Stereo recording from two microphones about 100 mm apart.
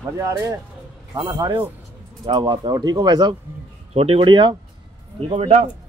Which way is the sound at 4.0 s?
65° right (ahead or behind).